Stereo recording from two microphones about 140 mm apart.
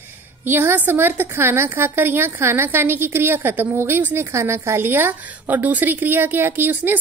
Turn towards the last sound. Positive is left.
turn(degrees=-15)  # may be behind; listen again after turning